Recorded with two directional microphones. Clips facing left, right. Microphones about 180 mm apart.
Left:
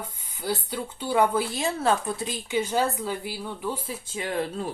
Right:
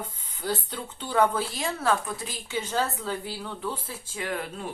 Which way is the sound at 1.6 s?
25° left (ahead or behind).